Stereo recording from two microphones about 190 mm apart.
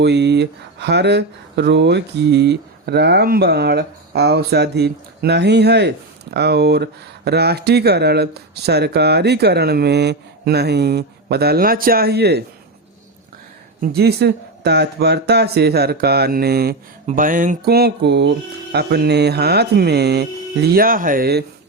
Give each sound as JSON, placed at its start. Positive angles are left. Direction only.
{"t": 0.0, "sound": "speech", "side_deg": -65}
{"t": 13.8, "sound": "speech", "side_deg": -60}
{"t": 17.1, "sound": "speech", "side_deg": -45}